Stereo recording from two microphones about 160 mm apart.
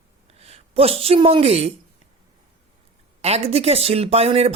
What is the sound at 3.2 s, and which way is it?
Speech, 40° right (ahead or behind).